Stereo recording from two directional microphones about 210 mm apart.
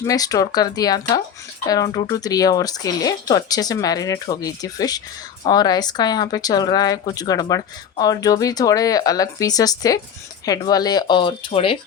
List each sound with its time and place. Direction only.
0.0 s speech: 15° left (ahead or behind)